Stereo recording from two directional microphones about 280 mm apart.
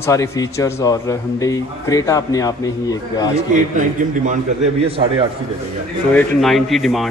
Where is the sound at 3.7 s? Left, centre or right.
Right.